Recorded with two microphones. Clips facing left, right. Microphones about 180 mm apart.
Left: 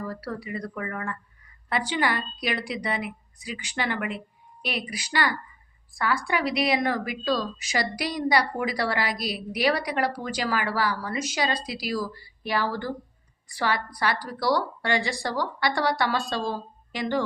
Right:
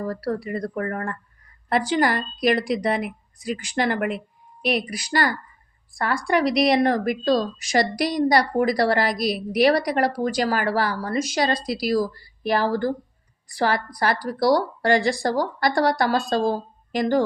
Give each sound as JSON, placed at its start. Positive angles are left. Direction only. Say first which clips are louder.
{"t": 0.0, "sound": "a woman's voice", "louder": "right 7 dB", "side_deg": -40}